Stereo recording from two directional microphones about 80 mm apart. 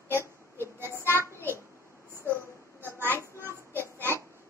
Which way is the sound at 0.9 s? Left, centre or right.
Left.